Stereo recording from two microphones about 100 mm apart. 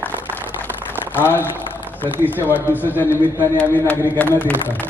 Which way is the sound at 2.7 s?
20° left (ahead or behind).